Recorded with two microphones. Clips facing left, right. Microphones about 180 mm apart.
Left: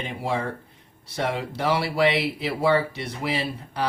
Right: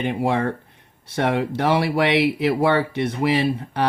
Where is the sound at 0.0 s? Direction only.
60° right (ahead or behind).